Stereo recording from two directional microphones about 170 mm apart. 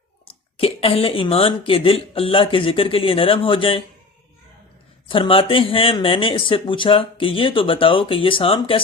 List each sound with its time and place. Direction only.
0.3 s speech: 35° left (ahead or behind)
5.0 s speech: 30° left (ahead or behind)